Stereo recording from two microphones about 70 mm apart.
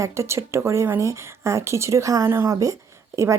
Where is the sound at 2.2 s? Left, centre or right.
Right.